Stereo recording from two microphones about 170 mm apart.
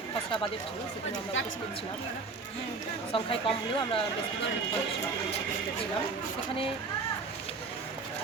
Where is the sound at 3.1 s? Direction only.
30° left (ahead or behind).